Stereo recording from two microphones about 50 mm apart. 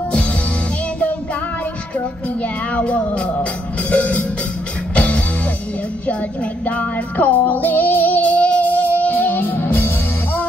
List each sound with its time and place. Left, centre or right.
2.0 s speech: left
3.9 s music: left
6.6 s music: left